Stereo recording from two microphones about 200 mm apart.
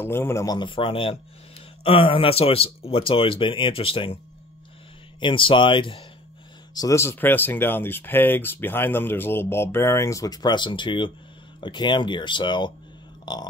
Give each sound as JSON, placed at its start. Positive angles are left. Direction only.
{"t": 0.0, "sound": "speech", "side_deg": 10}
{"t": 5.2, "sound": "speech", "side_deg": 25}
{"t": 13.2, "sound": "burping", "side_deg": 20}